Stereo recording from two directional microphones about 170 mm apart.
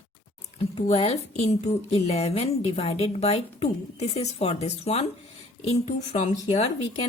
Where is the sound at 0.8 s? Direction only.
35° left (ahead or behind).